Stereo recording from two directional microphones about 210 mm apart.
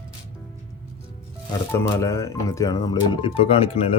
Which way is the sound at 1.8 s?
15° left (ahead or behind).